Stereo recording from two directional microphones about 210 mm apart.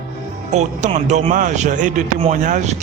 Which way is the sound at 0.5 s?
35° right (ahead or behind).